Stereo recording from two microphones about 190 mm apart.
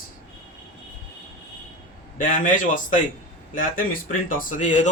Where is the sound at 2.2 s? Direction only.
45° left (ahead or behind).